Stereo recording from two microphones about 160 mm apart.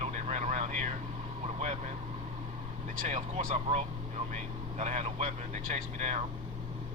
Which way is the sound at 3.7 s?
40° right (ahead or behind).